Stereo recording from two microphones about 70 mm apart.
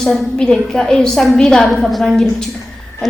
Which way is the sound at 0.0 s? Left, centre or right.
Centre.